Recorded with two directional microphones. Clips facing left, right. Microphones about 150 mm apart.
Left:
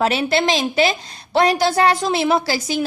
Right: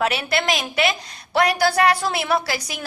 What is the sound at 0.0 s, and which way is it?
A woman's voice, 30° left (ahead or behind).